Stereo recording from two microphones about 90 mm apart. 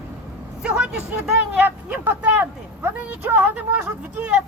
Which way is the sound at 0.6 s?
10° right (ahead or behind).